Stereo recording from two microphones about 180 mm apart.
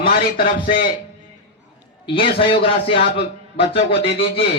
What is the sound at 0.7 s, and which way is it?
Speech, 50° left (ahead or behind).